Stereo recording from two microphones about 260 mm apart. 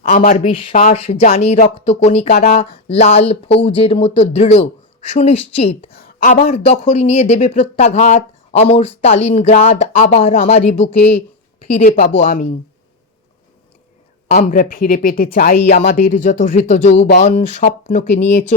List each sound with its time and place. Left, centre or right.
0.1 s speech: left
2.3 s speech: left
2.6 s speech: left
5.9 s speech: left
14.3 s speech: left